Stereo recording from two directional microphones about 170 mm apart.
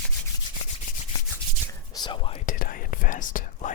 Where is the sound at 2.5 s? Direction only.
55° left (ahead or behind).